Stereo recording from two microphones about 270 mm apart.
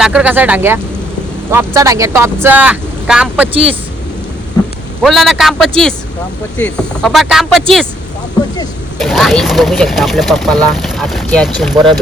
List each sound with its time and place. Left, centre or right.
0.0 s speech: centre
5.0 s speech: centre
9.0 s speech: centre